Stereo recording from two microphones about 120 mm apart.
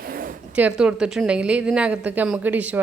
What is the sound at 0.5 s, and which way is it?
A woman's voice, 10° right (ahead or behind).